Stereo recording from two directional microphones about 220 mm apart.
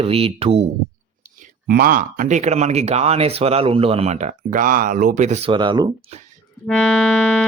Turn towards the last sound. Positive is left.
turn(degrees=0)  # may be behind; listen again after turning